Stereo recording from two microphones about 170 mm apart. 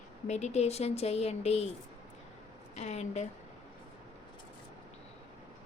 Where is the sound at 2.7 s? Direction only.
40° left (ahead or behind).